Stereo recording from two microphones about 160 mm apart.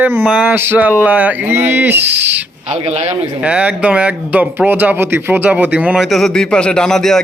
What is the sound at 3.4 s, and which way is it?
Speech, 10° right (ahead or behind).